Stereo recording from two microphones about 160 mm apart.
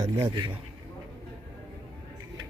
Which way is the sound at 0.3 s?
30° right (ahead or behind).